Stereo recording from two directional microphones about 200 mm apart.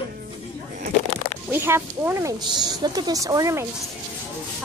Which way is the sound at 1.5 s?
10° right (ahead or behind).